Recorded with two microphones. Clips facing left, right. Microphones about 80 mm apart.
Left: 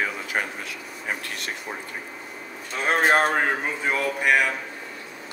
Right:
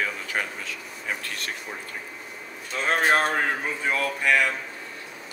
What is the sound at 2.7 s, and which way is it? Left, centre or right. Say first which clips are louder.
Speech: left 2 dB; centre.